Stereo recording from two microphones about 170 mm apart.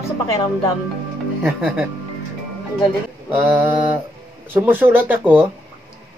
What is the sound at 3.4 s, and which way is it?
Speech, 10° right (ahead or behind).